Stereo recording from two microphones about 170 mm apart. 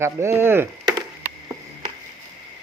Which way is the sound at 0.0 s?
15° right (ahead or behind).